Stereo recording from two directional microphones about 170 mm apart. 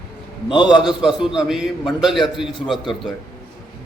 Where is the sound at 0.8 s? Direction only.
5° right (ahead or behind).